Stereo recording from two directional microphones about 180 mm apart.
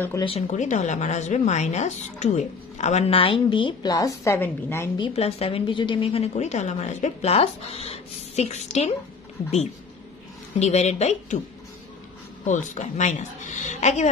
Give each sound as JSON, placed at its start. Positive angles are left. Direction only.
{"t": 0.2, "sound": "speech", "side_deg": 35}
{"t": 4.9, "sound": "speech", "side_deg": 30}
{"t": 10.6, "sound": "speech", "side_deg": 40}
{"t": 12.4, "sound": "speech", "side_deg": 40}